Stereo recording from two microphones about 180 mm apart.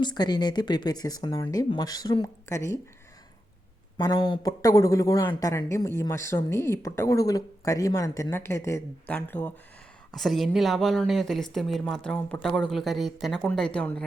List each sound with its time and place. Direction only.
0.0 s speech: 25° left (ahead or behind)
3.9 s speech: 25° left (ahead or behind); by 14.0 s 5° left (ahead or behind)